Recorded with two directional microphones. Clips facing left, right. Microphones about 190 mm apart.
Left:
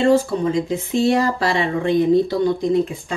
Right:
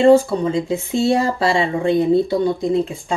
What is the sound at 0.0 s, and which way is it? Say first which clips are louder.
Speech: right 4 dB; 30° right (ahead or behind).